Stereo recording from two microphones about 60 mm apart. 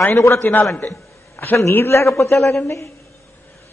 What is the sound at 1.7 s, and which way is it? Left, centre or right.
A man's voice, left.